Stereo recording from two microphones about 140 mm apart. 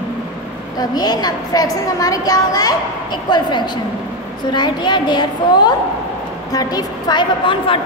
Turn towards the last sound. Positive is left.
turn(degrees=35)  # may be behind; listen again after turning